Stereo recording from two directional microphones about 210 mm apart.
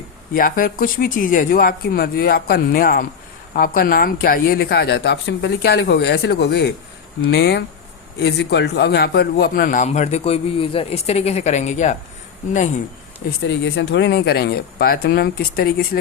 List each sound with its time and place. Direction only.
0.3 s a man's voice: 40° left (ahead or behind)
13.5 s speech: 55° left (ahead or behind)